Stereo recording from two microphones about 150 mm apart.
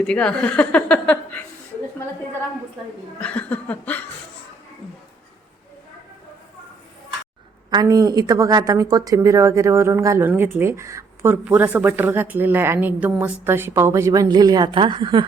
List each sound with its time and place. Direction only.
0.0 s speech: 5° left (ahead or behind)
3.2 s laughter: 10° left (ahead or behind)
7.7 s a woman's voice: 25° right (ahead or behind)